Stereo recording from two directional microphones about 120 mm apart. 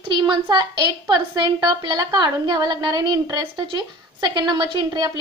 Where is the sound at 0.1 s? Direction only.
40° right (ahead or behind).